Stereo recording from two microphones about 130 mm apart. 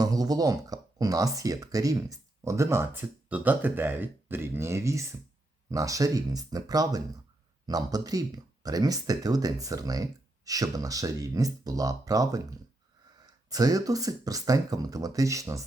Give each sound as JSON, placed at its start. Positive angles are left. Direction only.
{"t": 0.0, "sound": "speech", "side_deg": -30}